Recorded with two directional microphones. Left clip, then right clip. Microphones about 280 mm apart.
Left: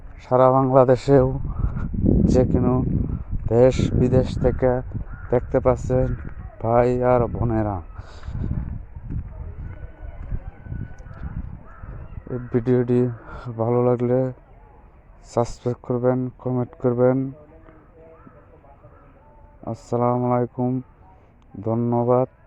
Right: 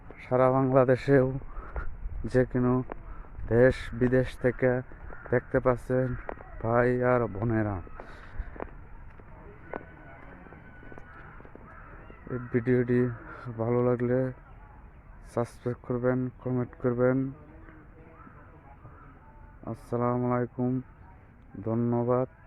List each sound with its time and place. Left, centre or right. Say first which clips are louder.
0.2 s a man's voice: left 8 dB; centre
12.3 s a man's voice: left 6 dB; centre
19.6 s a man's voice: left 8 dB; centre